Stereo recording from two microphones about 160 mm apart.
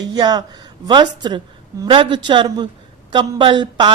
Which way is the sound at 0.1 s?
25° right (ahead or behind).